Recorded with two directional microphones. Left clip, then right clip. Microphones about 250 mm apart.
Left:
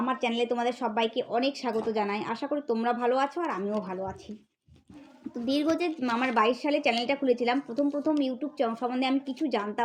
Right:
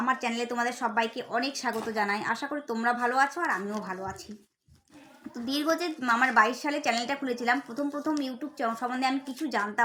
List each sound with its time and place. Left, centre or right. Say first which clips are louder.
0.0 s a woman's voice: even; centre
5.5 s a woman's voice: left 1 dB; centre